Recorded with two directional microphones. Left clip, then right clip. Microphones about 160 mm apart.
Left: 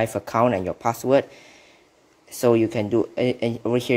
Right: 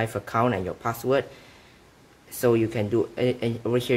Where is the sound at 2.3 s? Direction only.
35° left (ahead or behind).